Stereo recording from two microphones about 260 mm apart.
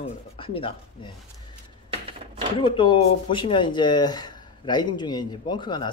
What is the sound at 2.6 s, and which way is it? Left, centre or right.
Speech, centre.